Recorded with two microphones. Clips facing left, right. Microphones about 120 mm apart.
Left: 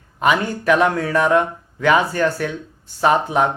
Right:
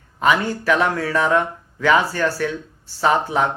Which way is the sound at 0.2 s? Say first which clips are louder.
Even; 20° left (ahead or behind).